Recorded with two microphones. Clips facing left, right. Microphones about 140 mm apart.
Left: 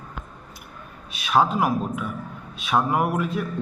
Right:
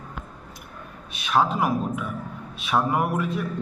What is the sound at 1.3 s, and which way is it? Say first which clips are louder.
Speech: left 2 dB; 5° left (ahead or behind).